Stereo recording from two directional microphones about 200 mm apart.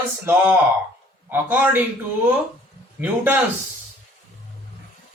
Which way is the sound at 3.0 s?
10° right (ahead or behind).